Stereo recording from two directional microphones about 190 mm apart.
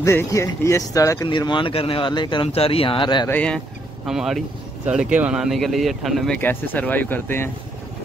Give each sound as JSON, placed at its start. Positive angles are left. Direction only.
{"t": 0.0, "sound": "speech", "side_deg": 15}
{"t": 3.3, "sound": "speech", "side_deg": 5}